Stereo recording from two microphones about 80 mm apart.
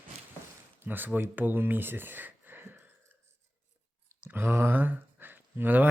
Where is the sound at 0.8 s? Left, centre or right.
Right.